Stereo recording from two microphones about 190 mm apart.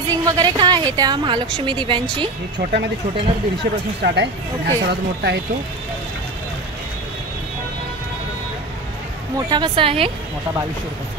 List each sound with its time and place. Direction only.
0.1 s a woman's voice: 20° right (ahead or behind)
2.6 s speech: 60° right (ahead or behind)
4.0 s speech: 65° right (ahead or behind)
9.5 s a woman's voice: 25° right (ahead or behind)